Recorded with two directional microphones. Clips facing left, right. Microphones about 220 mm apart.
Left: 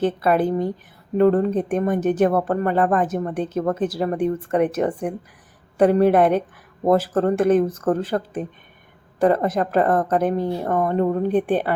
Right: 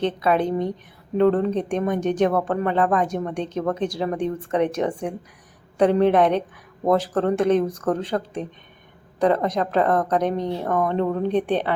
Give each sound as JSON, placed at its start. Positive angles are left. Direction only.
{"t": 0.0, "sound": "a woman's voice", "side_deg": 5}